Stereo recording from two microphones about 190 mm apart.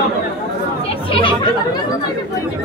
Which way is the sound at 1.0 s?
25° left (ahead or behind).